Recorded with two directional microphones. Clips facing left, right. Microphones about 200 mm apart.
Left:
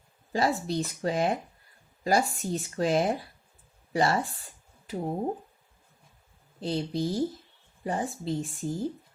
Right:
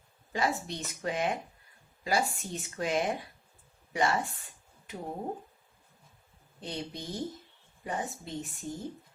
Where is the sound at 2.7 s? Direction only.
35° left (ahead or behind).